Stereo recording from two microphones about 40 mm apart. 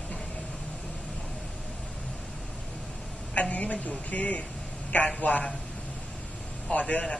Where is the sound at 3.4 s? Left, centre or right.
Left.